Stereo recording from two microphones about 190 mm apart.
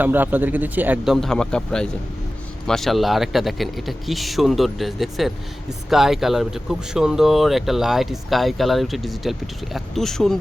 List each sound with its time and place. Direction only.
0.0 s speech: 10° right (ahead or behind)